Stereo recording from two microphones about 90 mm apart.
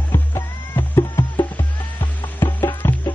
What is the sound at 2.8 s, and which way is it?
Music, 25° left (ahead or behind).